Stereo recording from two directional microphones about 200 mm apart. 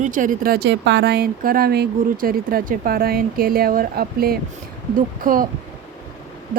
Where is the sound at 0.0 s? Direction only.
40° right (ahead or behind).